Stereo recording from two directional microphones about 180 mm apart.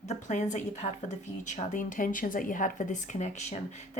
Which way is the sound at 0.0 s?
40° left (ahead or behind).